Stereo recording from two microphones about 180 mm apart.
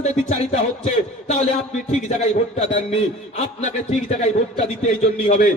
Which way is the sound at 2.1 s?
35° left (ahead or behind).